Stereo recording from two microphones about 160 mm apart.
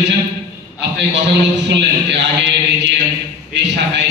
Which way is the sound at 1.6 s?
90° right.